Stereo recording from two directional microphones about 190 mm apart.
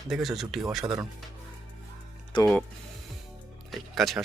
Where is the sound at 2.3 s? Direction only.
25° left (ahead or behind).